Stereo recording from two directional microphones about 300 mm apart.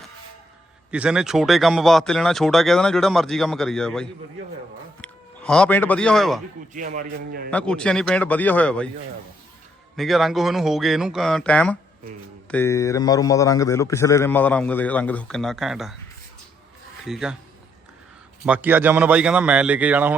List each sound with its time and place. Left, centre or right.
0.9 s a man's voice: centre
6.7 s a man's voice: right
7.5 s a man's voice: centre
9.9 s a man's voice: centre
17.1 s a man's voice: centre
18.4 s a man's voice: centre